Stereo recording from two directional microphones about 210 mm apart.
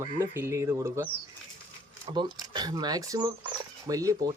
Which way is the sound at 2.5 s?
20° right (ahead or behind).